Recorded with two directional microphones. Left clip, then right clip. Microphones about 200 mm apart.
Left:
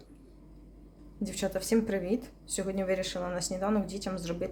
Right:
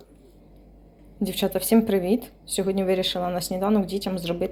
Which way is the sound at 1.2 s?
15° right (ahead or behind).